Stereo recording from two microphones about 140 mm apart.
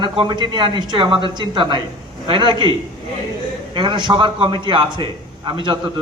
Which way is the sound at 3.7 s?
35° right (ahead or behind).